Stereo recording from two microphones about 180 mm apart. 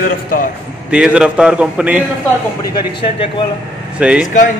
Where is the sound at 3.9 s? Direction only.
5° right (ahead or behind).